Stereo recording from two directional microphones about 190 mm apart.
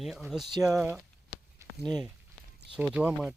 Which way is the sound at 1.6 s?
15° right (ahead or behind).